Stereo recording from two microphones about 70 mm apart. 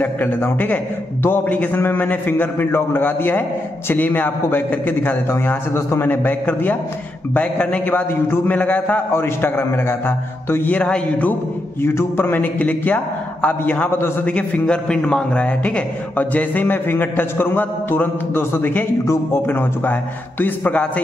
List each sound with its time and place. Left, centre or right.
0.0 s a man's voice: left
9.1 s a man's voice: left
10.7 s a man's voice: centre
11.8 s a man's voice: left
14.2 s a man's voice: centre